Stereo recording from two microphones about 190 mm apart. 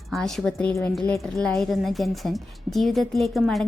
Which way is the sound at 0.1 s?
Centre (ahead or behind).